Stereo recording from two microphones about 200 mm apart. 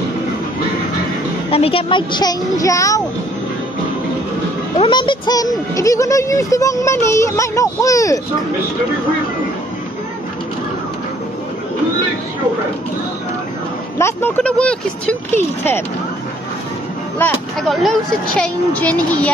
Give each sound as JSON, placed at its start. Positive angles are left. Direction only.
{"t": 1.5, "sound": "speech", "side_deg": 30}
{"t": 4.7, "sound": "speech", "side_deg": 25}
{"t": 13.9, "sound": "speech", "side_deg": 10}
{"t": 17.2, "sound": "speech", "side_deg": 5}